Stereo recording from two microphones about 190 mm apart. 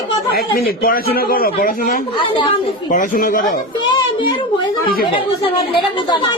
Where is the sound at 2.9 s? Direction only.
45° left (ahead or behind).